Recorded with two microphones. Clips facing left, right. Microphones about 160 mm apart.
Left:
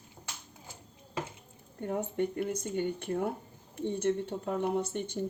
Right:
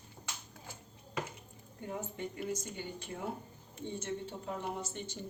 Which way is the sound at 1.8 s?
60° left (ahead or behind).